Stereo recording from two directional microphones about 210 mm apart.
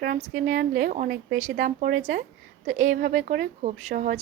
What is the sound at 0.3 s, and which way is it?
A woman's voice, 40° right (ahead or behind).